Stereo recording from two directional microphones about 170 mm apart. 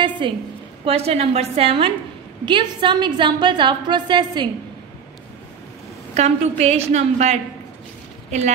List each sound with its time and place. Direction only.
0.2 s a woman's voice: 30° right (ahead or behind)
6.1 s a woman's voice: 40° right (ahead or behind)